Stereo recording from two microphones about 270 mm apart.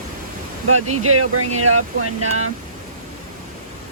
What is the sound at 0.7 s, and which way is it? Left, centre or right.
Speech, right.